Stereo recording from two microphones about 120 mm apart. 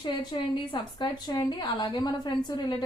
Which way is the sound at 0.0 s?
40° left (ahead or behind).